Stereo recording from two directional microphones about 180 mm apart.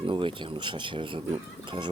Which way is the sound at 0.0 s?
30° right (ahead or behind).